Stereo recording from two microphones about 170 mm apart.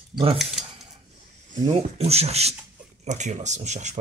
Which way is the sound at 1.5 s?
50° right (ahead or behind).